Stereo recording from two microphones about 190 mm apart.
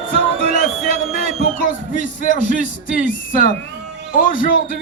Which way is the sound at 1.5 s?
45° left (ahead or behind).